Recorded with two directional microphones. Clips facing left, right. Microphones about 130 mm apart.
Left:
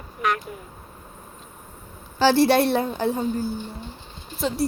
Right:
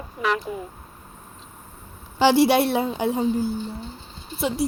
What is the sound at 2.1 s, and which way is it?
A woman's voice, 15° right (ahead or behind).